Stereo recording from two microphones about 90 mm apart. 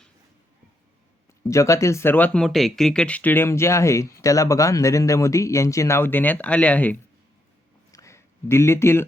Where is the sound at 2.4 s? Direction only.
Centre (ahead or behind).